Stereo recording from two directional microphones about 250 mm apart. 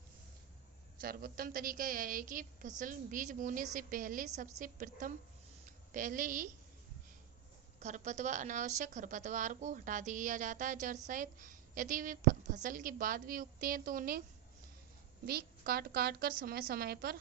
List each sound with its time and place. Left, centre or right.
1.0 s a woman's voice: right
7.8 s a woman's voice: right
15.3 s a woman's voice: right